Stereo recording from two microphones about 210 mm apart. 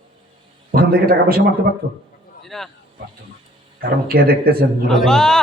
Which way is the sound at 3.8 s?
45° right (ahead or behind).